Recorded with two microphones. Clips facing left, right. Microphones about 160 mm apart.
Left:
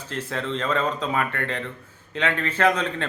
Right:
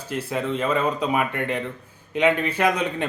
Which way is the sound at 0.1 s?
10° right (ahead or behind).